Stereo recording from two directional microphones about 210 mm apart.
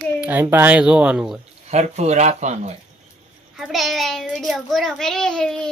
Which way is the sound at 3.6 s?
Centre (ahead or behind).